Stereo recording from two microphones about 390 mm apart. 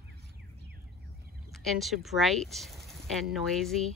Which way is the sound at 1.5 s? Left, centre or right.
Centre.